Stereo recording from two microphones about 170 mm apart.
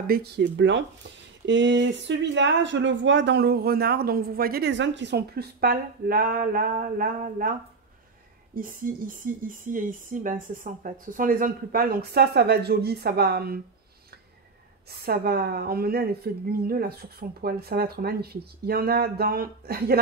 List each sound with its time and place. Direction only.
0.0 s speech: 65° right (ahead or behind)
8.5 s a woman's voice: 55° right (ahead or behind)
14.9 s a woman's voice: 65° right (ahead or behind)